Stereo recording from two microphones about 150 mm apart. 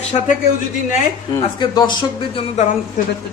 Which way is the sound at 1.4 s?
30° left (ahead or behind).